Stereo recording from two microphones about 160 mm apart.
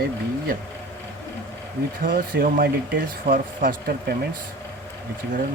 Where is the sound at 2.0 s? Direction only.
65° right (ahead or behind).